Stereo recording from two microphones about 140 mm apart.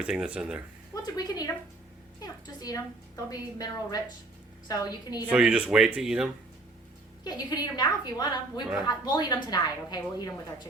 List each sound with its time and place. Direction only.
0.0 s speech: 5° right (ahead or behind)
1.0 s speech: 25° left (ahead or behind)
2.1 s a sound: 25° left (ahead or behind)
3.2 s speech: 25° left (ahead or behind)
5.3 s speech: 5° right (ahead or behind)
7.3 s speech: 30° left (ahead or behind)